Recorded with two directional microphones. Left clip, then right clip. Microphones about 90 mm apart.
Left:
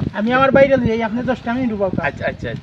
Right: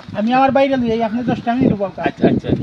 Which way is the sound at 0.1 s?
35° left (ahead or behind).